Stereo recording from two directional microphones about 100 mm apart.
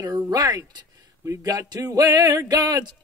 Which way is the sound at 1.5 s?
40° right (ahead or behind).